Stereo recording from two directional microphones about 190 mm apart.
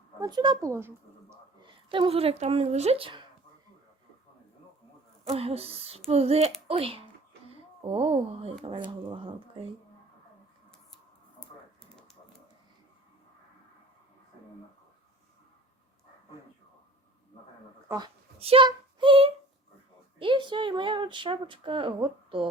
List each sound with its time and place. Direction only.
0.2 s speech: 20° right (ahead or behind)
0.7 s speech: 15° right (ahead or behind)
1.6 s speech: 25° right (ahead or behind)
5.3 s speech: 30° right (ahead or behind)
17.8 s a sound: 20° right (ahead or behind)
20.1 s speech: 25° right (ahead or behind)